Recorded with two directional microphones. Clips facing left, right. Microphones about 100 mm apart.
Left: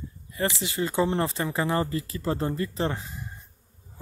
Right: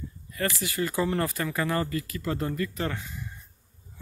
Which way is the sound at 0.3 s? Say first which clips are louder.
Left 2 dB; 20° left (ahead or behind).